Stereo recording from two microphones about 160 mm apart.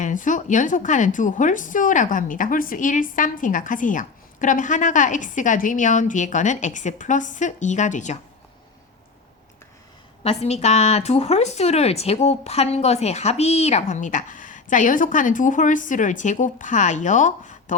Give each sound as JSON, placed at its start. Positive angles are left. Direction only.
{"t": 0.0, "sound": "a woman's voice", "side_deg": 55}
{"t": 10.2, "sound": "a woman's voice", "side_deg": 40}